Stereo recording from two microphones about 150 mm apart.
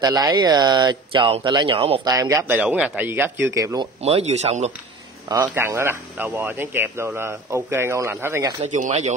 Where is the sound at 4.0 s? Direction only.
45° right (ahead or behind).